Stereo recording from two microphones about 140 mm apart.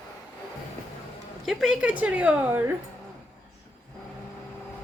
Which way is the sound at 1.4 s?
5° right (ahead or behind).